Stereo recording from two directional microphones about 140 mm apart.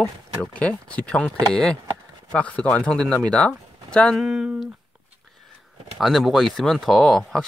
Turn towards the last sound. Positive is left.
turn(degrees=0)  # may be behind; listen again after turning